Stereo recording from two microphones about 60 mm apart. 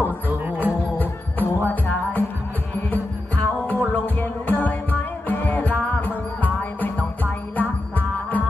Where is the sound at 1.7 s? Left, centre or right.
Left.